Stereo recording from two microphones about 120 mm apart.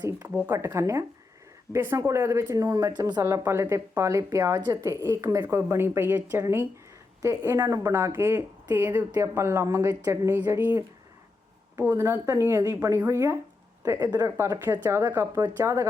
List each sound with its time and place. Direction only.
0.3 s a woman's voice: 20° right (ahead or behind)